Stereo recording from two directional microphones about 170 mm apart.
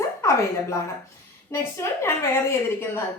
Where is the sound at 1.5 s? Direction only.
15° left (ahead or behind).